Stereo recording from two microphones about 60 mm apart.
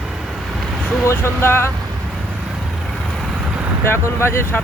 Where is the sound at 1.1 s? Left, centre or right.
Left.